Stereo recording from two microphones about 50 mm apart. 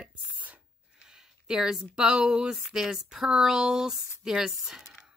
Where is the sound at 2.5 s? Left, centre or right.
Centre.